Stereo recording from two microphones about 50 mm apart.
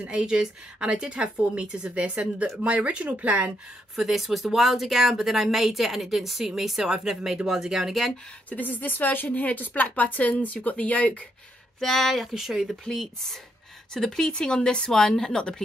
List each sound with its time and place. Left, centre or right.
0.0 s a woman's voice: centre
3.9 s speech: centre
8.5 s a woman's voice: left
11.8 s speech: centre
12.8 s speech: centre